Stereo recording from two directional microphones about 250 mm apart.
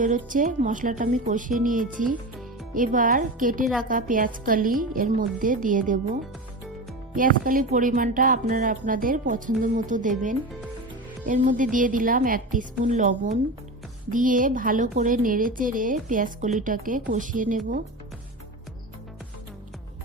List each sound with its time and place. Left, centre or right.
0.0 s a woman's voice: right
7.2 s a woman's voice: right